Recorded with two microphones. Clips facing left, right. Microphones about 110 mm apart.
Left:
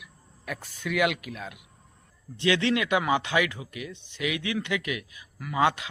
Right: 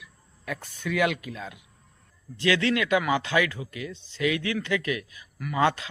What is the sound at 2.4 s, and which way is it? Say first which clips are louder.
Speech: even; 20° left (ahead or behind).